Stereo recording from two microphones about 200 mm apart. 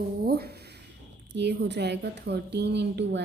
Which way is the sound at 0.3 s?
50° right (ahead or behind).